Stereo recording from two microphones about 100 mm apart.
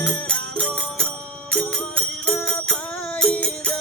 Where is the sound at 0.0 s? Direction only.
10° left (ahead or behind).